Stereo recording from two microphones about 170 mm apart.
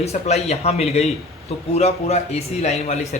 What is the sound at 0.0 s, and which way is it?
A man's voice, 40° left (ahead or behind).